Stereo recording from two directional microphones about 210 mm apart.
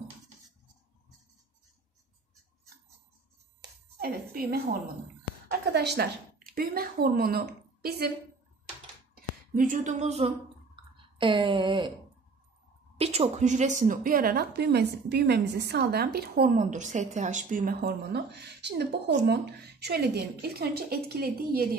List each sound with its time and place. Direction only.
4.0 s a woman's voice: 45° right (ahead or behind)
5.7 s a woman's voice: 50° right (ahead or behind)
9.1 s speech: 40° right (ahead or behind)
11.1 s a sound: 25° right (ahead or behind)
12.9 s a woman's voice: 30° right (ahead or behind); by 21.6 s 50° right (ahead or behind)